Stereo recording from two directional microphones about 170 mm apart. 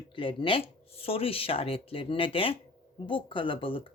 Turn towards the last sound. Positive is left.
turn(degrees=30)  # may be behind; listen again after turning